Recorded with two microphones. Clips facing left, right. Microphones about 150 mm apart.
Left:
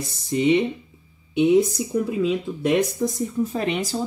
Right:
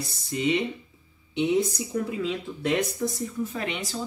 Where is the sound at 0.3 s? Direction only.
25° left (ahead or behind).